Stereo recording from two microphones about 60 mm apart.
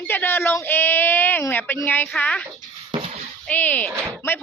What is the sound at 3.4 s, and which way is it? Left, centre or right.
Speech, left.